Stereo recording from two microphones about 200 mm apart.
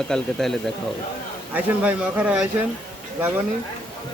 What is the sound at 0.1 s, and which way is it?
Speech, centre (ahead or behind).